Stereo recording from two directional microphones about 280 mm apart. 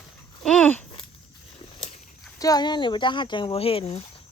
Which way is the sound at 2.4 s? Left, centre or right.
Centre.